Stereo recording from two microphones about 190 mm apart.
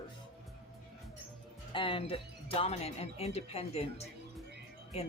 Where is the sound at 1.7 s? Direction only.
25° left (ahead or behind).